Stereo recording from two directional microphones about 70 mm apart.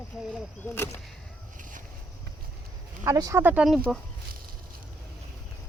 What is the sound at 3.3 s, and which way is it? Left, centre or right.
Speech, right.